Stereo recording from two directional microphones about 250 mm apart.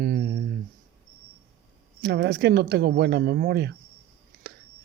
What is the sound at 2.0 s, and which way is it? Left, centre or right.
Speech, right.